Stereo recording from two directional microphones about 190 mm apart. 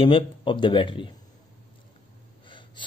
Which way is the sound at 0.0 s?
25° left (ahead or behind).